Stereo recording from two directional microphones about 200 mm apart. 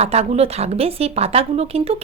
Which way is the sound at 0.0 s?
30° right (ahead or behind).